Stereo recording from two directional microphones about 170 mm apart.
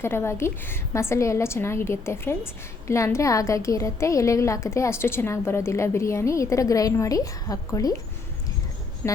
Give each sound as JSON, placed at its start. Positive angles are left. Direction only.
{"t": 0.0, "sound": "a woman's voice", "side_deg": 15}
{"t": 9.0, "sound": "speech", "side_deg": 10}